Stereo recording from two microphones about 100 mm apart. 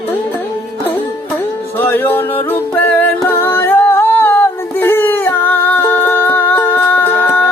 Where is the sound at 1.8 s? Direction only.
20° left (ahead or behind).